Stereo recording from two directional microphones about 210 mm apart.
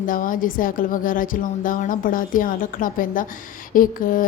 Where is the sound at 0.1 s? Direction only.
40° left (ahead or behind).